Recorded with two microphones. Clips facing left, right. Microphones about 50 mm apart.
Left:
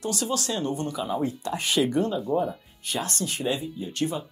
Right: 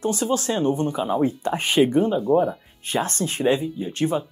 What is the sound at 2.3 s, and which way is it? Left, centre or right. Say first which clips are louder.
Speech: right 6 dB; centre.